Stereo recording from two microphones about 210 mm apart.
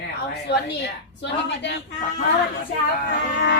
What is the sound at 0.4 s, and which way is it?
A woman's voice, 55° left (ahead or behind).